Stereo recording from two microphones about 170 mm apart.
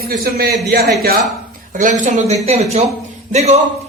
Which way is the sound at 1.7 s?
50° right (ahead or behind).